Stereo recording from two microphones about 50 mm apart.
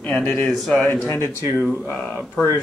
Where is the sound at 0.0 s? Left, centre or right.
Left.